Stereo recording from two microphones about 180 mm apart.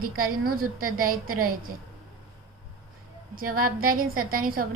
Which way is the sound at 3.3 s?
55° right (ahead or behind).